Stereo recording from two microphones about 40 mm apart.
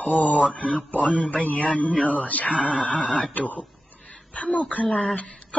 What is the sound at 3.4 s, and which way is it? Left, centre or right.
Speech, left.